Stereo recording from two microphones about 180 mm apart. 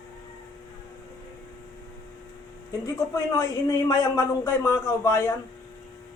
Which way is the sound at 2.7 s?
15° left (ahead or behind).